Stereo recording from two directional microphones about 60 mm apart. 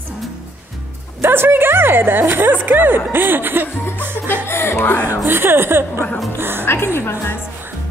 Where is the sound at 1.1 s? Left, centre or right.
Right.